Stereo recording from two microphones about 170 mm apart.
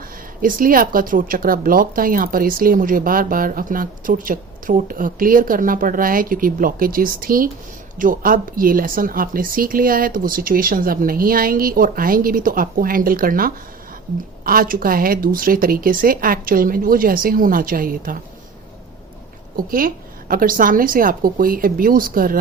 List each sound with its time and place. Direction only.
0.4 s speech: 55° right (ahead or behind)
19.5 s speech: 55° right (ahead or behind)